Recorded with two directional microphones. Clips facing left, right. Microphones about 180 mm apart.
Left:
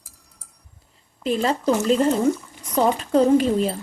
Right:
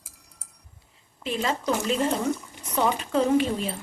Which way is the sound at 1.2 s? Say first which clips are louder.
Left 6 dB; 40° left (ahead or behind).